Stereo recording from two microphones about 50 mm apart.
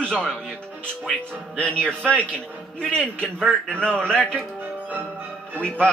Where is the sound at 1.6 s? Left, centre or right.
Left.